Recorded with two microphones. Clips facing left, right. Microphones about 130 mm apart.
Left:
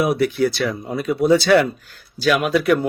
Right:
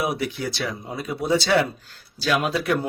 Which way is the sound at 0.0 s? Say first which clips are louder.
Left 8 dB; 25° right (ahead or behind).